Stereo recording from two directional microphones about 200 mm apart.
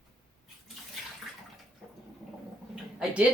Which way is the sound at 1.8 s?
Centre (ahead or behind).